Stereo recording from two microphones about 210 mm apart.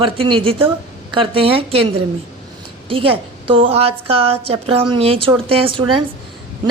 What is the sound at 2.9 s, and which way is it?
A woman's voice, 25° right (ahead or behind).